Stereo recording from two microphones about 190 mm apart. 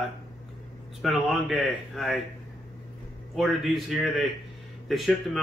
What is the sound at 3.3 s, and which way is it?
Speech, centre (ahead or behind).